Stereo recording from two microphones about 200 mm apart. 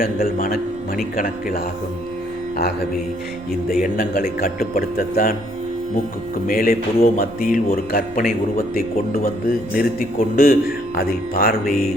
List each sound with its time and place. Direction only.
0.0 s speech: 45° left (ahead or behind)
3.7 s speech: 45° left (ahead or behind)
6.5 s speech: 45° left (ahead or behind)